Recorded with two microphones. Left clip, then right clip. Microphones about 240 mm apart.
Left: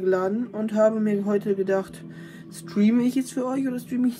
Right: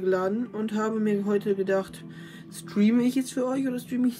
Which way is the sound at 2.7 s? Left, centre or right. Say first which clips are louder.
Left 2 dB; centre.